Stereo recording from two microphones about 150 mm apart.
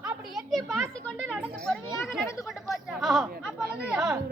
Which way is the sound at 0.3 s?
Centre (ahead or behind).